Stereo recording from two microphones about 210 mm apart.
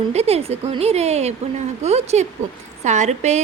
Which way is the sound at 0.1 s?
30° right (ahead or behind).